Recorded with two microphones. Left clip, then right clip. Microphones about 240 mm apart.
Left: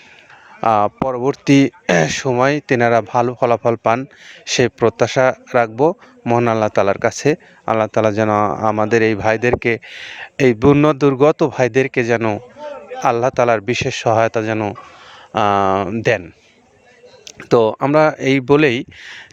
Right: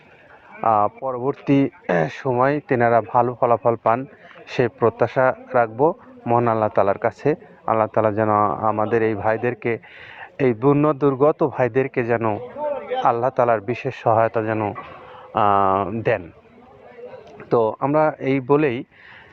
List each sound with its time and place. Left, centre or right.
0.6 s a man's voice: left
12.6 s a sound: centre
13.0 s a man's voice: left
17.3 s a man's voice: left